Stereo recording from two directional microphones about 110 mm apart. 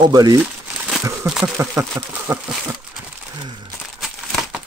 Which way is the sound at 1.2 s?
5° right (ahead or behind).